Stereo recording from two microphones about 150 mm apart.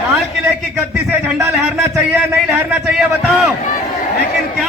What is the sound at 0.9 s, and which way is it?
A man's voice, 10° right (ahead or behind).